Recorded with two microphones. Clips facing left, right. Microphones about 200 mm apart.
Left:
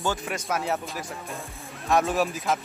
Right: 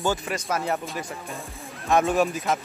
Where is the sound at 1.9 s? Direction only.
Centre (ahead or behind).